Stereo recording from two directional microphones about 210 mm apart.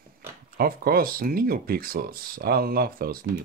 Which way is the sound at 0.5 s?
45° right (ahead or behind).